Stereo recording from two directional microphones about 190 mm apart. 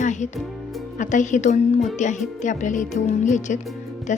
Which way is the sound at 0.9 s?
40° left (ahead or behind).